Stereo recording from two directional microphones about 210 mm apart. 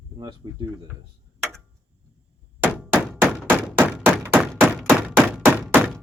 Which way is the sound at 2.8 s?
5° right (ahead or behind).